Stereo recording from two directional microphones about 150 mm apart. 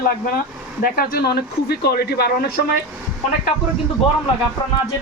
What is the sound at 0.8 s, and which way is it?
Speech, 80° left.